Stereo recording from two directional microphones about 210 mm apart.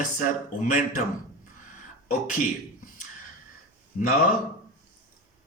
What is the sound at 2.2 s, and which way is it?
Speech, 35° left (ahead or behind).